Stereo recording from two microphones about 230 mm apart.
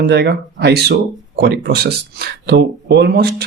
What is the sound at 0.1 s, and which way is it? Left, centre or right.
Speech, right.